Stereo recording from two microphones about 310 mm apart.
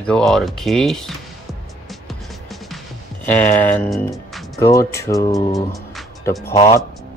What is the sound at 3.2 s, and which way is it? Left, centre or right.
Speech, centre.